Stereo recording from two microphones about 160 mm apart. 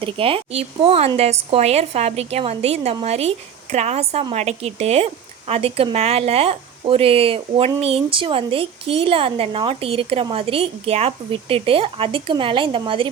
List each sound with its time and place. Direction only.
0.0 s speech: 35° right (ahead or behind)